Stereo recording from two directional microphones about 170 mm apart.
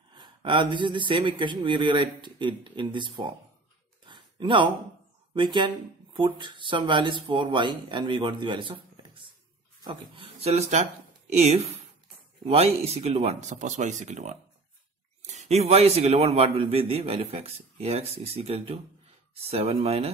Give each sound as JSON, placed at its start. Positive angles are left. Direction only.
{"t": 0.1, "sound": "speech", "side_deg": -30}
{"t": 4.0, "sound": "a sound", "side_deg": -30}
{"t": 5.3, "sound": "a man's voice", "side_deg": -30}